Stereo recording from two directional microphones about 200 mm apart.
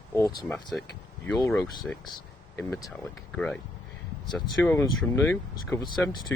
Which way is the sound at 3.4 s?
5° left (ahead or behind).